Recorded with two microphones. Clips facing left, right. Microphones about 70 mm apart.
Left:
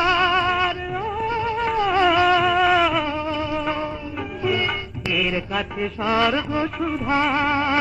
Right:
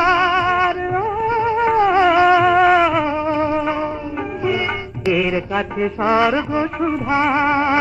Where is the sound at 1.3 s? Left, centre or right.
Right.